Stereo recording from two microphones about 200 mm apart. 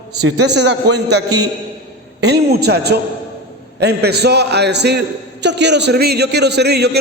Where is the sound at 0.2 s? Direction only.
55° right (ahead or behind).